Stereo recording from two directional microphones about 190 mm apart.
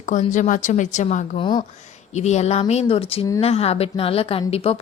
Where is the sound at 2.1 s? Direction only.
35° left (ahead or behind).